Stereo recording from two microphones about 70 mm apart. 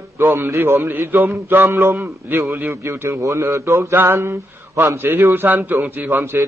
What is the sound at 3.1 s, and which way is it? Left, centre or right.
Speech, right.